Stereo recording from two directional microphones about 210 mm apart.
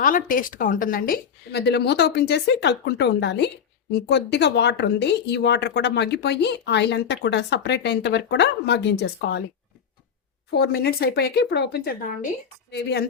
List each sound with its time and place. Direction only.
0.0 s a woman's voice: 40° left (ahead or behind)
10.5 s a woman's voice: 50° left (ahead or behind)